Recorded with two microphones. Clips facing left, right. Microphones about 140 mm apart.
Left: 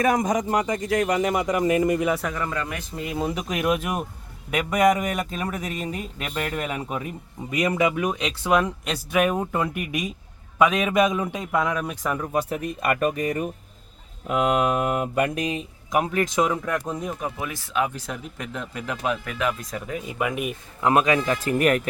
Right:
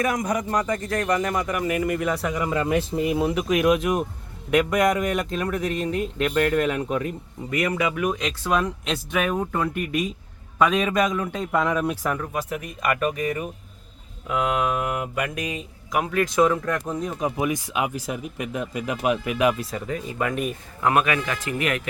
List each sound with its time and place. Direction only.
0.0 s speech: 25° left (ahead or behind)
2.0 s speech: 5° left (ahead or behind)
2.3 s speech: 20° right (ahead or behind)
3.2 s speech: 5° right (ahead or behind)
7.5 s speech: 20° left (ahead or behind); by 10.9 s centre (ahead or behind)
10.9 s speech: 15° left (ahead or behind); by 12.1 s centre (ahead or behind)
12.3 s speech: 35° left (ahead or behind); by 17.1 s 10° left (ahead or behind)
17.2 s speech: 15° right (ahead or behind)
20.1 s speech: 10° left (ahead or behind)
20.8 s speech: 25° left (ahead or behind)
21.4 s speech: 40° left (ahead or behind)